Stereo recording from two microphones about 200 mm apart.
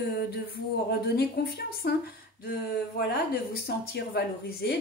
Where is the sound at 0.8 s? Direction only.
50° left (ahead or behind).